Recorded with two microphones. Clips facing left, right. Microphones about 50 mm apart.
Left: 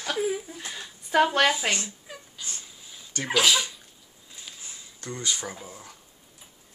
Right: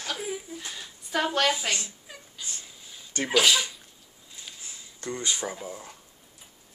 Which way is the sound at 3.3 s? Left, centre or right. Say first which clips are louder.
Even; centre.